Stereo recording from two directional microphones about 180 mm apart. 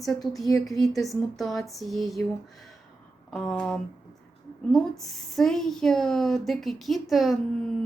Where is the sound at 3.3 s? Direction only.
5° left (ahead or behind).